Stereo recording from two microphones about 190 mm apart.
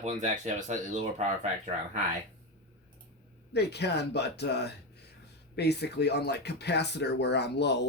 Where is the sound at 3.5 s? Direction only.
60° left (ahead or behind).